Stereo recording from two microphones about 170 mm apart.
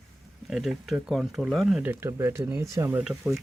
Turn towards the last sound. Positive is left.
turn(degrees=-5)  # may be behind; listen again after turning